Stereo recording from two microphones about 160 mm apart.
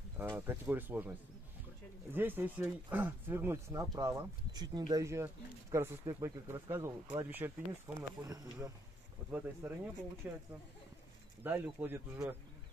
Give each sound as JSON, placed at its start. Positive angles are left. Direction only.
{"t": 0.2, "sound": "speech", "side_deg": -15}
{"t": 2.1, "sound": "speech", "side_deg": -10}
{"t": 9.6, "sound": "speech", "side_deg": -10}
{"t": 11.4, "sound": "speech", "side_deg": -10}